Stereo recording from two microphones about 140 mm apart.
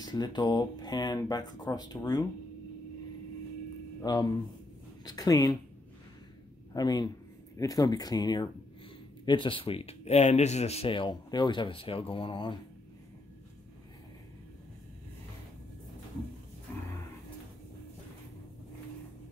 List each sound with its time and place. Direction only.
0.0 s speech: 30° left (ahead or behind)
4.0 s speech: 30° left (ahead or behind)
6.7 s a man's voice: 30° left (ahead or behind)